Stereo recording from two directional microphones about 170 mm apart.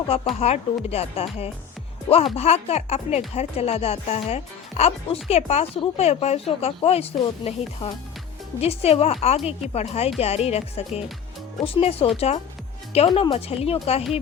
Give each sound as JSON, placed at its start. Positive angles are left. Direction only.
{"t": 0.1, "sound": "speech", "side_deg": 35}